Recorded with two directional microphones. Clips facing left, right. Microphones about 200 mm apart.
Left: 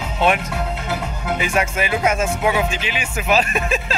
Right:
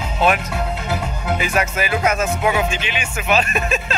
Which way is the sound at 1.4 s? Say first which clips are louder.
Left 1 dB; 25° left (ahead or behind).